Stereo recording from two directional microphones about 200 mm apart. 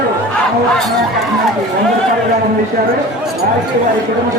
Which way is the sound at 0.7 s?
Centre (ahead or behind).